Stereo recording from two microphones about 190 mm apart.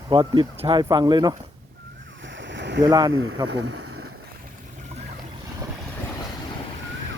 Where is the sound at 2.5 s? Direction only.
65° right (ahead or behind).